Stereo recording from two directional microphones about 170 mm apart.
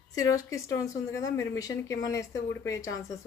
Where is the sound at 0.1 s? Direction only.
20° left (ahead or behind).